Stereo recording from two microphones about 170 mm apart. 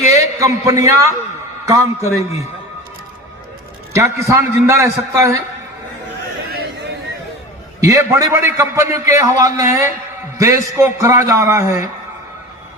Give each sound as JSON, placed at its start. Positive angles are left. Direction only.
{"t": 0.2, "sound": "a man's voice", "side_deg": -20}
{"t": 3.9, "sound": "a man's voice", "side_deg": -15}
{"t": 7.8, "sound": "a man's voice", "side_deg": -20}